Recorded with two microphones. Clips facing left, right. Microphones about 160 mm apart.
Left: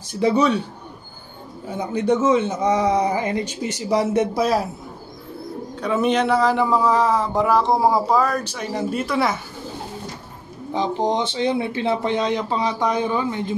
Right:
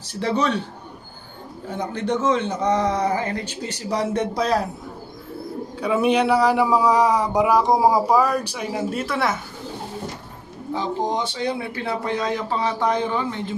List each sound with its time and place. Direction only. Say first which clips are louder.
0.2 s a man's voice: left 4 dB; 10° left (ahead or behind)
1.7 s a man's voice: left 4 dB; 10° left (ahead or behind)
5.8 s speech: right 1 dB; 10° right (ahead or behind)
10.7 s speech: left 3 dB; 20° left (ahead or behind)